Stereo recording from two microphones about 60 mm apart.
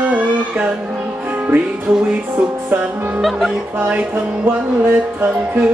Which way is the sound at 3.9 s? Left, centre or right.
Right.